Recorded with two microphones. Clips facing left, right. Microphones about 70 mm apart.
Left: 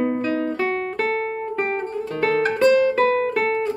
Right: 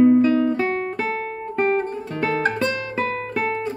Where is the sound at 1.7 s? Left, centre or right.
Centre.